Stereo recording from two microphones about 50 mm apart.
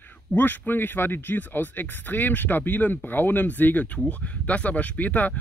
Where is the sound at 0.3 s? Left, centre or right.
Left.